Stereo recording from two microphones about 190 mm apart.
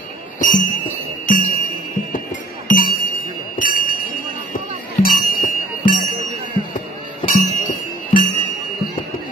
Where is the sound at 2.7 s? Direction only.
50° left (ahead or behind).